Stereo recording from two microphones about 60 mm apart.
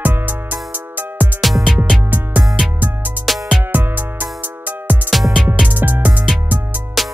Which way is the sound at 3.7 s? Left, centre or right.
Right.